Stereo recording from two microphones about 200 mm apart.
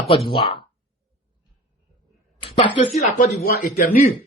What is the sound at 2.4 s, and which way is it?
Speech, 25° left (ahead or behind).